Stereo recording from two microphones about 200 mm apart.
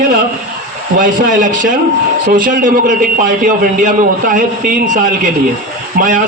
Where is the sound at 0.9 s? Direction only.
40° right (ahead or behind).